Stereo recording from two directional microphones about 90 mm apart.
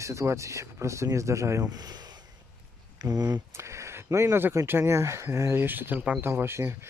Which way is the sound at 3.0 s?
45° right (ahead or behind).